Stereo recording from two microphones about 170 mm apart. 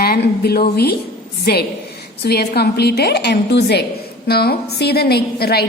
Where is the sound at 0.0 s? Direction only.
65° left (ahead or behind).